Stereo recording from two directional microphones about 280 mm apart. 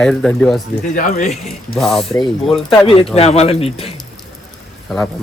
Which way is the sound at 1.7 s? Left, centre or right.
Centre.